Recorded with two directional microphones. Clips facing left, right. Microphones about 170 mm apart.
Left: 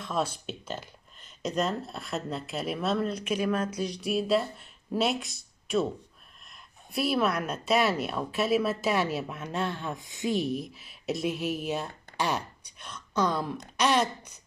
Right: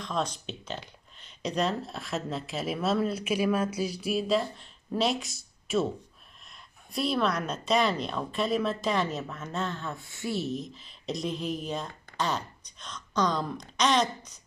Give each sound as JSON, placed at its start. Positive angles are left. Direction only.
{"t": 0.0, "sound": "speech", "side_deg": 5}